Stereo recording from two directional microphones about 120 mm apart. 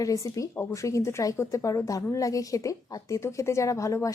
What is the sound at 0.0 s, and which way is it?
Speech, 25° left (ahead or behind).